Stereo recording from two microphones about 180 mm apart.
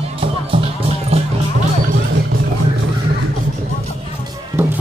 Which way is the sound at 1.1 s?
35° right (ahead or behind).